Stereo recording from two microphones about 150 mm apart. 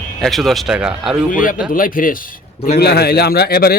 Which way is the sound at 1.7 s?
70° left (ahead or behind).